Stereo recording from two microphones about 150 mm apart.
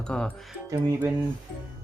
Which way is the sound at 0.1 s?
5° left (ahead or behind).